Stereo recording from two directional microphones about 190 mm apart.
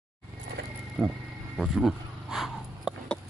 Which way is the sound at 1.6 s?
Centre (ahead or behind).